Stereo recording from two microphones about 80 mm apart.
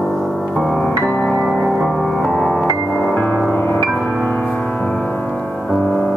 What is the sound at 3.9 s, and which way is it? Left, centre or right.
Music, centre.